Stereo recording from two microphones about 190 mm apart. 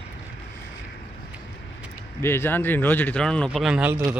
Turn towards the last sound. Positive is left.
turn(degrees=-10)  # may be behind; listen again after turning